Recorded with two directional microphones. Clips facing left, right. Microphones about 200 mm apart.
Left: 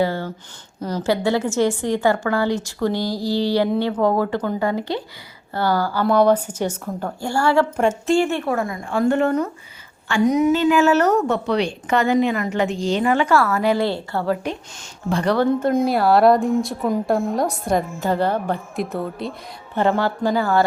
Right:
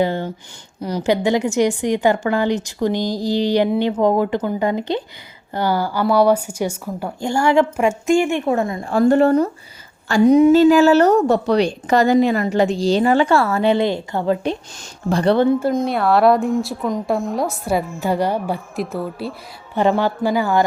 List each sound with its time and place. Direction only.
0.0 s a sound: 20° right (ahead or behind)
0.8 s a woman's voice: 15° right (ahead or behind)
8.9 s a woman's voice: 35° right (ahead or behind); by 14.3 s 20° right (ahead or behind)
15.1 s a woman's voice: 30° right (ahead or behind)
15.8 s a woman's voice: centre (ahead or behind); by 20.7 s 15° right (ahead or behind)